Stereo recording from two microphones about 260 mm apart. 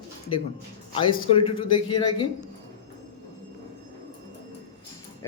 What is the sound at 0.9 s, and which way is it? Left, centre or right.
A man's voice, centre.